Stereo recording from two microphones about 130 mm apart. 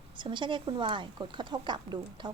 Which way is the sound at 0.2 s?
40° right (ahead or behind).